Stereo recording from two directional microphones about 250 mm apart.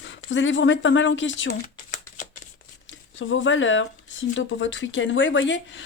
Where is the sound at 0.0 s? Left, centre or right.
Left.